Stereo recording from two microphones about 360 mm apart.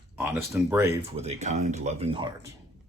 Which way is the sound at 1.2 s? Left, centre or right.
Centre.